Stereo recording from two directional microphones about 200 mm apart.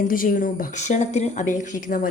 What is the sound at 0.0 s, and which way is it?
A woman's voice, 45° left (ahead or behind).